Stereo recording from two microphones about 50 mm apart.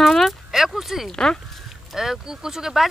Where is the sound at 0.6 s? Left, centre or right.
Centre.